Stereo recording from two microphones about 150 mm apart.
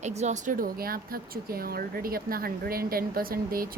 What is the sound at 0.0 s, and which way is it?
Speech, 50° right (ahead or behind).